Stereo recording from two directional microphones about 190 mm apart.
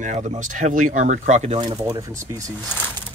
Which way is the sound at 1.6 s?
25° right (ahead or behind).